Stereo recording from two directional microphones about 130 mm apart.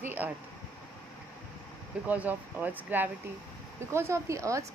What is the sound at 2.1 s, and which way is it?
A woman's voice, 10° right (ahead or behind).